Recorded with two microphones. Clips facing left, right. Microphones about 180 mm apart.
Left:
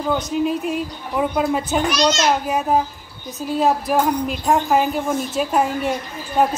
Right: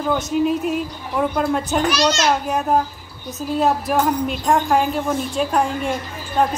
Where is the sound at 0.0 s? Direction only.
Centre (ahead or behind).